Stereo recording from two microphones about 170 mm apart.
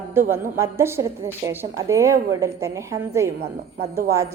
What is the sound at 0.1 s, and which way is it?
A woman's voice, 15° right (ahead or behind).